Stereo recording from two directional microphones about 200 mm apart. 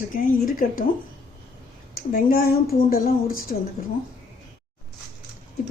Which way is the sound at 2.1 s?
50° left (ahead or behind).